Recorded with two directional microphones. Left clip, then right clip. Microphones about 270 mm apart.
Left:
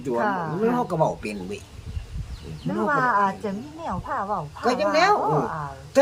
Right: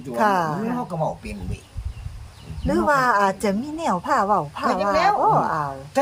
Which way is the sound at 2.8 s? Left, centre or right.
Right.